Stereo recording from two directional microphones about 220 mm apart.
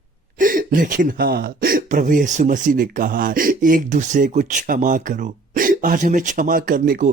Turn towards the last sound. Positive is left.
turn(degrees=-40)  # may be behind; listen again after turning